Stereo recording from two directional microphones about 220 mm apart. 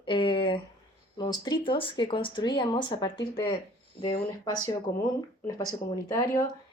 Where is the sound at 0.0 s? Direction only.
20° left (ahead or behind).